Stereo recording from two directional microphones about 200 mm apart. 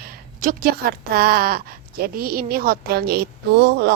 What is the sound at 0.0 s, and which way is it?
Speech, 45° right (ahead or behind).